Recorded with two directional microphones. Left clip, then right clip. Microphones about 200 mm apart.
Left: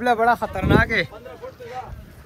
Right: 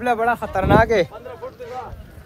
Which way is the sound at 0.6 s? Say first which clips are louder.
Right 4 dB; 30° right (ahead or behind).